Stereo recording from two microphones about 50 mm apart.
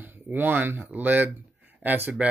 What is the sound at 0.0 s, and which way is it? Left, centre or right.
Speech, right.